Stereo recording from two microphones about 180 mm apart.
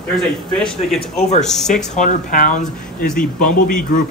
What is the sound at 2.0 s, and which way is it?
Speech, 45° left (ahead or behind).